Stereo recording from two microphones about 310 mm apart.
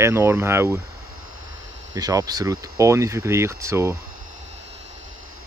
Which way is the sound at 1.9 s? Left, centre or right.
Centre.